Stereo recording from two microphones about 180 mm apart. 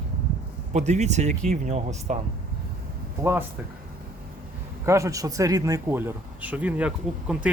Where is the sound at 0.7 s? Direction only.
40° right (ahead or behind).